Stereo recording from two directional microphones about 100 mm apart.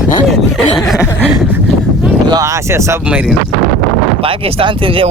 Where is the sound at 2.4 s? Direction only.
30° right (ahead or behind).